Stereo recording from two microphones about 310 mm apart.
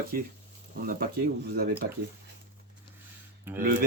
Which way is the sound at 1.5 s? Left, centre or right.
Right.